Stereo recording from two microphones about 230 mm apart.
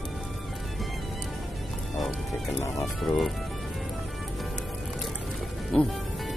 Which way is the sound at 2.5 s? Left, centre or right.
Centre.